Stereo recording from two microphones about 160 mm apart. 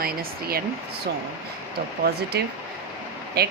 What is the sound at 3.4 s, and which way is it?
Speech, 90° right.